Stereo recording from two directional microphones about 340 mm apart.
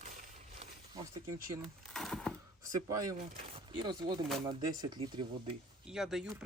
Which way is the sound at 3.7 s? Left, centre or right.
Centre.